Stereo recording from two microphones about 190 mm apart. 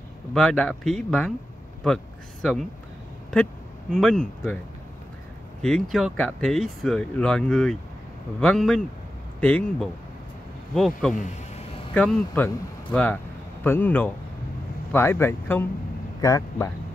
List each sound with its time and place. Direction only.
0.3 s speech: 5° left (ahead or behind)
3.9 s speech: centre (ahead or behind)
5.6 s speech: 5° left (ahead or behind)
11.1 s a sound: 40° left (ahead or behind)
11.9 s speech: 5° left (ahead or behind)